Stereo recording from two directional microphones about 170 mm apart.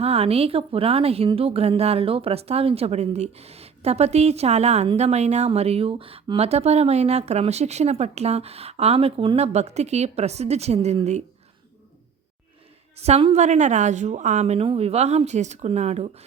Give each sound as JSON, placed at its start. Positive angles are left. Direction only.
{"t": 0.0, "sound": "a woman's voice", "side_deg": -35}
{"t": 13.0, "sound": "a woman's voice", "side_deg": -40}